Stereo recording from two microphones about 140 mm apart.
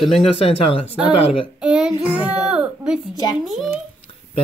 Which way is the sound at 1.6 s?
5° right (ahead or behind).